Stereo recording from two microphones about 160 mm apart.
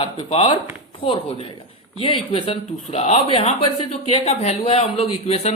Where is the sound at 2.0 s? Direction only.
35° left (ahead or behind).